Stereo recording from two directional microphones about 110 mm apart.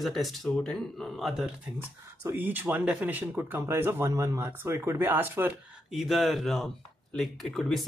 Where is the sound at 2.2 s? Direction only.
20° right (ahead or behind).